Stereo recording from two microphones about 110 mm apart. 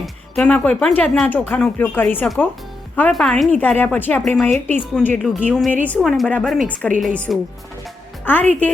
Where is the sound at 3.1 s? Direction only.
5° left (ahead or behind).